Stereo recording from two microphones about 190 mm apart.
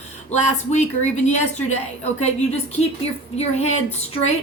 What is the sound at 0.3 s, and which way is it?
A woman's voice, 35° left (ahead or behind).